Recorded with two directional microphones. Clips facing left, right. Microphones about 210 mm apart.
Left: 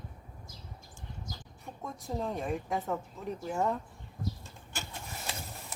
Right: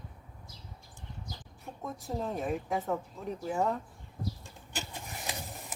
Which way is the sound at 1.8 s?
Centre (ahead or behind).